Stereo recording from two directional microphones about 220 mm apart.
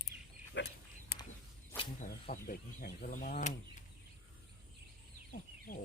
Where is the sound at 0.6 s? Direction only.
55° left (ahead or behind).